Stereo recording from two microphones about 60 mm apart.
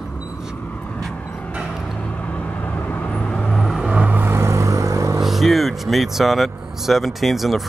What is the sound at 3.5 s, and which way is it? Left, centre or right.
Vehicle, centre.